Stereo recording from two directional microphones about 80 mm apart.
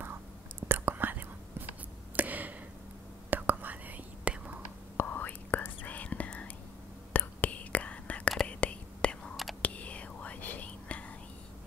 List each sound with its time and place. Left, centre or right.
0.0 s whispering: right
2.1 s a sound: right
3.3 s whispering: right
4.9 s whispering: left